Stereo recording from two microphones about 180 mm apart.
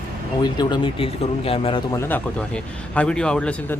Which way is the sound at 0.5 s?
25° left (ahead or behind).